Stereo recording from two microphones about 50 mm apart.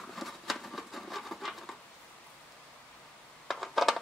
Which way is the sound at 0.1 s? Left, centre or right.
Centre.